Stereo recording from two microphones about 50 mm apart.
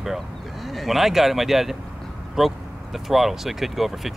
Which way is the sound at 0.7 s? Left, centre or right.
Centre.